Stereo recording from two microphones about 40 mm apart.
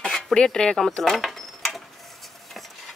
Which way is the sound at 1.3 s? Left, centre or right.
Centre.